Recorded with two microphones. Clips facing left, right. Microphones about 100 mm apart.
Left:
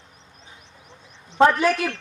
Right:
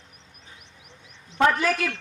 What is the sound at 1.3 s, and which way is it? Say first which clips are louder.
Speech: left 4 dB; 35° left (ahead or behind).